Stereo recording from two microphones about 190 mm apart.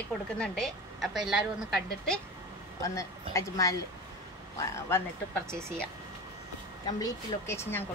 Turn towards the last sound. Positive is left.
turn(degrees=15)  # may be behind; listen again after turning